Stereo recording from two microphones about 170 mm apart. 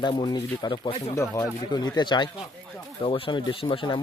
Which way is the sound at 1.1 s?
15° left (ahead or behind).